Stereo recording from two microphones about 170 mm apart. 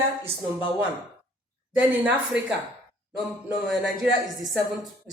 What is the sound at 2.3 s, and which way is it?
Speech, 90° right.